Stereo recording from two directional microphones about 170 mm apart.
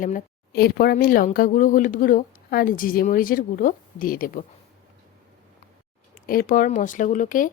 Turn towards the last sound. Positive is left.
turn(degrees=50)  # may be behind; listen again after turning